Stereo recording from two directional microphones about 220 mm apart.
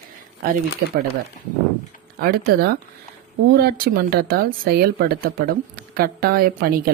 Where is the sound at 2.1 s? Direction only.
45° right (ahead or behind).